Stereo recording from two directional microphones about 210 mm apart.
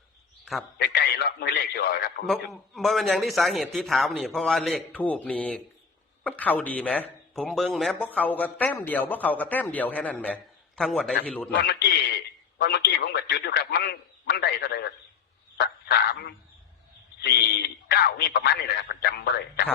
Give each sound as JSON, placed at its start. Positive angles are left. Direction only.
{"t": 0.8, "sound": "a man's voice", "side_deg": 50}
{"t": 2.2, "sound": "a man's voice", "side_deg": 0}
{"t": 11.6, "sound": "a man's voice", "side_deg": 50}
{"t": 15.5, "sound": "frog", "side_deg": 50}
{"t": 17.2, "sound": "a man's voice", "side_deg": 50}